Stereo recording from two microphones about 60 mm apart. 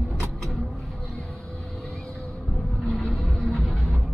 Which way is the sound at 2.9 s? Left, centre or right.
Centre.